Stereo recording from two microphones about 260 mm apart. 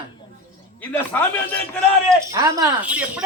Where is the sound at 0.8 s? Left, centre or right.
Centre.